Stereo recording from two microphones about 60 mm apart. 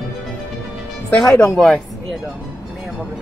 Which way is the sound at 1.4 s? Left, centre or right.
Centre.